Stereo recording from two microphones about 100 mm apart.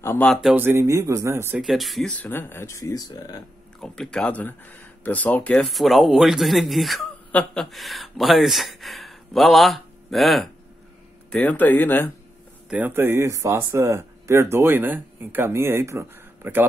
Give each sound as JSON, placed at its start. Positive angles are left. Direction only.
{"t": 0.2, "sound": "speech", "side_deg": 0}
{"t": 0.6, "sound": "speech", "side_deg": -25}
{"t": 1.6, "sound": "speech", "side_deg": 0}
{"t": 2.2, "sound": "speech", "side_deg": 25}
{"t": 3.8, "sound": "speech", "side_deg": 5}
{"t": 5.7, "sound": "speech", "side_deg": 0}
{"t": 11.3, "sound": "speech", "side_deg": 15}
{"t": 12.6, "sound": "speech", "side_deg": -10}
{"t": 12.9, "sound": "speech", "side_deg": -25}